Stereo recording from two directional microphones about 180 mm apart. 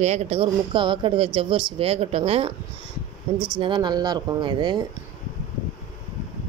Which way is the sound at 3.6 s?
25° right (ahead or behind).